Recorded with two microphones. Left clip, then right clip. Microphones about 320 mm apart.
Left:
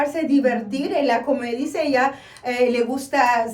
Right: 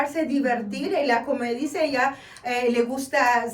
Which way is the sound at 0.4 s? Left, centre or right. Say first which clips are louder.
Left 4 dB; centre.